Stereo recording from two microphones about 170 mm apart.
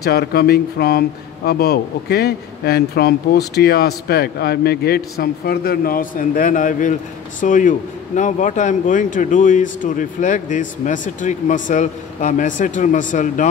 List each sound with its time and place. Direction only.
0.0 s speech: 65° left (ahead or behind); by 13.5 s 50° left (ahead or behind)